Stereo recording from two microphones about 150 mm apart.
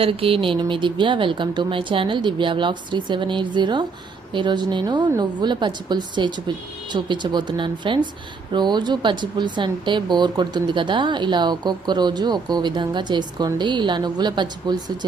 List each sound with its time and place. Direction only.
0.0 s speech: 40° right (ahead or behind)